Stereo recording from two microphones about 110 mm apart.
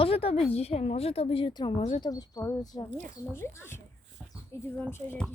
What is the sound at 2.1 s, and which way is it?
Speech, 35° left (ahead or behind).